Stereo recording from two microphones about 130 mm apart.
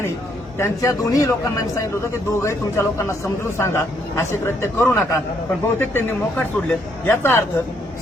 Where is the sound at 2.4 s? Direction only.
20° left (ahead or behind).